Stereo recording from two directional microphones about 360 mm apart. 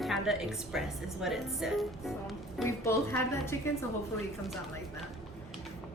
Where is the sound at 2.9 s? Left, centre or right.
Centre.